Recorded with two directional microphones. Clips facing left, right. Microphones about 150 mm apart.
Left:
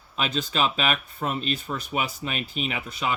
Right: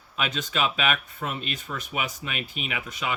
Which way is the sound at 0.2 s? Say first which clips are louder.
Left 2 dB; 35° left (ahead or behind).